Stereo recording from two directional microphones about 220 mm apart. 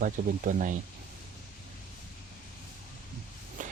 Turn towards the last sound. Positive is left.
turn(degrees=-35)  # may be behind; listen again after turning